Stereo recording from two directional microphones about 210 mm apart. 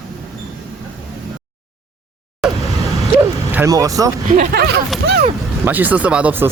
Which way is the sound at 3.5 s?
15° right (ahead or behind).